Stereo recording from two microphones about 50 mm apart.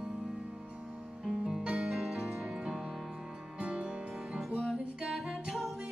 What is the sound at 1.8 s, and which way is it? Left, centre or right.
Music, centre.